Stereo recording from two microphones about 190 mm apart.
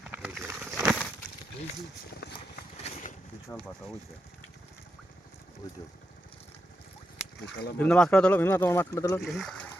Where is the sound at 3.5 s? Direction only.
10° left (ahead or behind).